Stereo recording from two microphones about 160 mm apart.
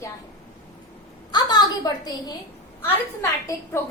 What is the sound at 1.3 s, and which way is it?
A woman's voice, 25° left (ahead or behind).